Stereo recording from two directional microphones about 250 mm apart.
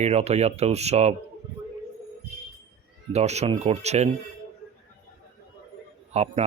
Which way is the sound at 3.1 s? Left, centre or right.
Right.